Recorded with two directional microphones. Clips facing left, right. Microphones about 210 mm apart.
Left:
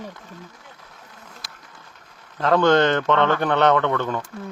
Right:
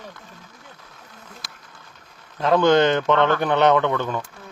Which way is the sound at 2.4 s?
10° right (ahead or behind).